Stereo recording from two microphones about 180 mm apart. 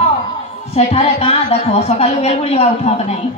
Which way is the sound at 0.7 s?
35° left (ahead or behind).